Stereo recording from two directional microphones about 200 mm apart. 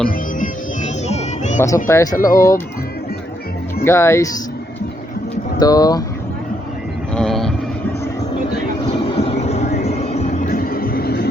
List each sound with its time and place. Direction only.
1.0 s a sound: 35° left (ahead or behind)
1.6 s speech: 15° left (ahead or behind)
3.8 s speech: 15° left (ahead or behind)
5.5 s speech: 20° left (ahead or behind)
7.1 s vehicle: 5° left (ahead or behind)
8.9 s music: 30° left (ahead or behind); by 11.3 s 55° left (ahead or behind)